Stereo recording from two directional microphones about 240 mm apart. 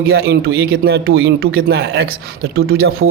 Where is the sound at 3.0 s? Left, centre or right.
Right.